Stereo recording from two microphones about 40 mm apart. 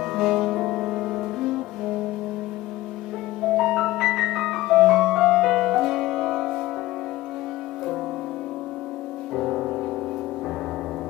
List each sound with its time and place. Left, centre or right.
0.0 s music: centre
3.4 s music: centre
9.3 s music: centre